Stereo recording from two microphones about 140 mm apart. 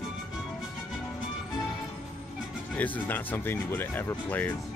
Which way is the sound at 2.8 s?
15° left (ahead or behind).